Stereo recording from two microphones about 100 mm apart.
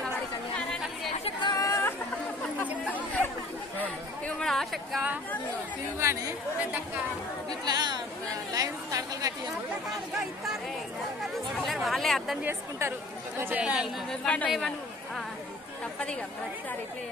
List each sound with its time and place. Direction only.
1.4 s chatter: 35° left (ahead or behind)
2.9 s chatter: 15° left (ahead or behind)
4.4 s a sound: 5° left (ahead or behind)
5.9 s speech: 30° right (ahead or behind)
7.6 s a woman's voice: 40° right (ahead or behind)
11.5 s speech: centre (ahead or behind)
12.4 s speech: 25° right (ahead or behind)
13.4 s speech: 15° right (ahead or behind)
14.2 s speech: 15° left (ahead or behind)